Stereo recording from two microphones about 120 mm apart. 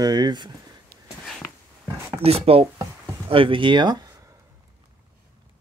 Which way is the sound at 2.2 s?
55° right (ahead or behind).